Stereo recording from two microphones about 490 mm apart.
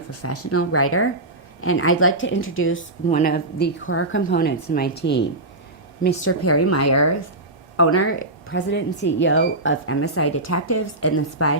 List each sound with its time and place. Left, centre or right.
0.1 s speech: left